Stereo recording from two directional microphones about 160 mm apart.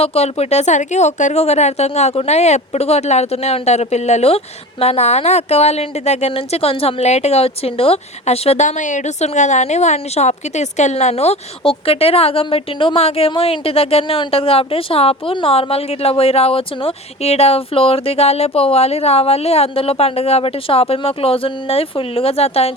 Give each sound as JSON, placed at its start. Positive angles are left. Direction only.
{"t": 0.0, "sound": "a woman's voice", "side_deg": 40}